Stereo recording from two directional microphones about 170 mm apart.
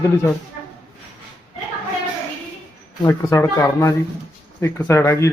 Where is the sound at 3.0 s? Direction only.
15° left (ahead or behind).